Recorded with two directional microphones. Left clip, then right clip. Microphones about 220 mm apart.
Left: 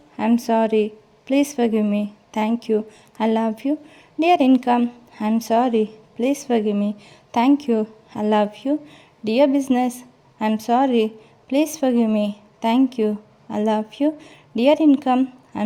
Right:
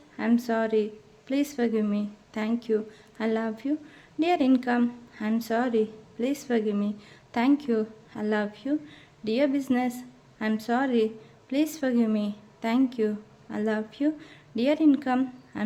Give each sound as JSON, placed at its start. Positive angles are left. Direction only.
{"t": 0.2, "sound": "a woman's voice", "side_deg": 30}